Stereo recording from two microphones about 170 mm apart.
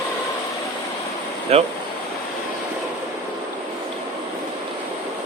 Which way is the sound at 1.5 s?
35° right (ahead or behind).